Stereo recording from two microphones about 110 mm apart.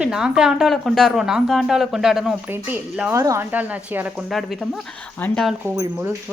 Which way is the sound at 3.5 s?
15° right (ahead or behind).